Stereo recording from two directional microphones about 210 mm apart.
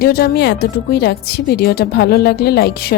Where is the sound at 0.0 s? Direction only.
50° left (ahead or behind).